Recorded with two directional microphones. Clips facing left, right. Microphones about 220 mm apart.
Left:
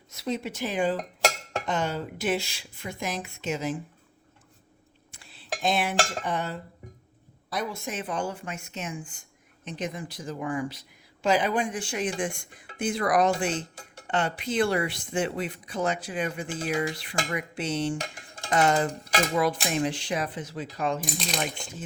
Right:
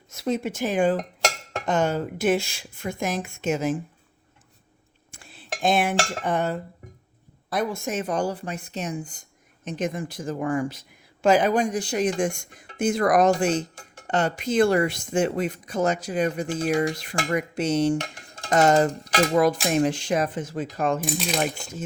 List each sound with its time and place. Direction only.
0.1 s speech: 50° right (ahead or behind)
5.1 s cutlery: 50° right (ahead or behind)
7.5 s speech: 50° right (ahead or behind)